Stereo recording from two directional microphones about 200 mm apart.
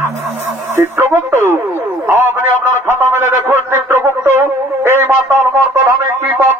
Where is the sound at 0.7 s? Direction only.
15° right (ahead or behind).